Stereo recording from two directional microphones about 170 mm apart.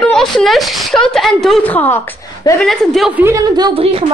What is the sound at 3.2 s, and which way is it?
Speech, 15° right (ahead or behind).